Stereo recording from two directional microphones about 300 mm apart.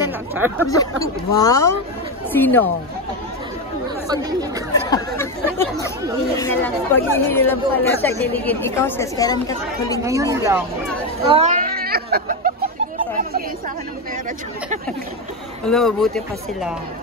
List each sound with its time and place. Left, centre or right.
0.3 s speech: centre
1.4 s speech: centre
4.1 s speech: centre
4.8 s speech: centre
10.0 s speech: centre
11.2 s a sound: right
15.6 s speech: centre